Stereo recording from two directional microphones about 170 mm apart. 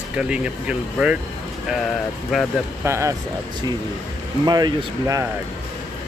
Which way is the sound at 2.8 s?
15° right (ahead or behind).